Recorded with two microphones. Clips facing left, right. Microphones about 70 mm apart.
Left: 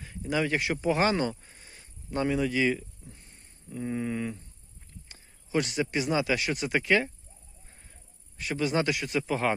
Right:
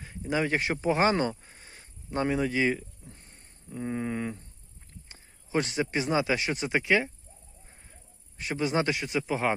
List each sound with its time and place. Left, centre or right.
0.0 s speech: right
1.1 s a sound: right
5.0 s speech: right
6.8 s speech: centre
8.4 s a man's voice: right
9.0 s speech: centre